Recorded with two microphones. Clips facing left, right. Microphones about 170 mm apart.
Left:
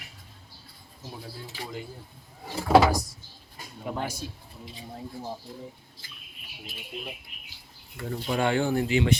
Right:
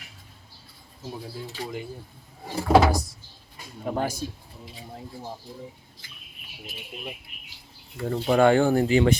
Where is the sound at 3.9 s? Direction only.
35° right (ahead or behind).